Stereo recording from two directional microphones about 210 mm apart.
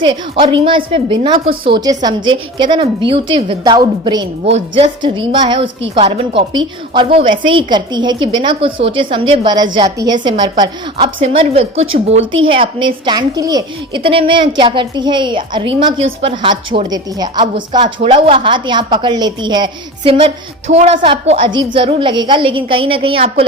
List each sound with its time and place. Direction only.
0.0 s a woman's voice: 20° right (ahead or behind)
12.2 s a woman's voice: 65° right (ahead or behind)
12.5 s a woman's voice: 25° right (ahead or behind)
20.7 s a woman's voice: 30° right (ahead or behind)